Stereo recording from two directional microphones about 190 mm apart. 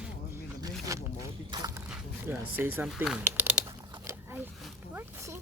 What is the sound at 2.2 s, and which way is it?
Speech, 10° right (ahead or behind).